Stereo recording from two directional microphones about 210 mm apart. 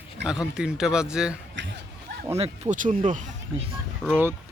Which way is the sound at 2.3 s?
30° right (ahead or behind).